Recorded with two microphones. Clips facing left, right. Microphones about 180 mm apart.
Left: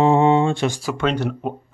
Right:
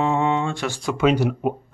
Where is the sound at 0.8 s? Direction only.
Centre (ahead or behind).